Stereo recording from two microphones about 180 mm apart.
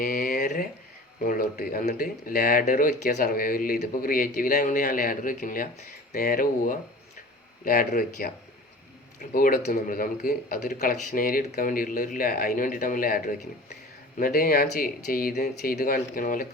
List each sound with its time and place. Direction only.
0.0 s a sound: 55° left (ahead or behind)
1.2 s speech: 50° left (ahead or behind)
9.3 s speech: 50° left (ahead or behind)